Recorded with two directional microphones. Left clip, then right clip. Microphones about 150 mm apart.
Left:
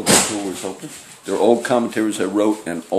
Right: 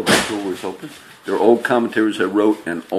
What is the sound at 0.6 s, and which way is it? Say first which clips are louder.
Speech: right 1 dB; 5° left (ahead or behind).